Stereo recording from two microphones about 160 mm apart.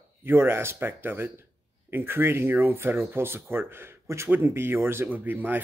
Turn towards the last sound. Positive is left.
turn(degrees=-10)  # may be behind; listen again after turning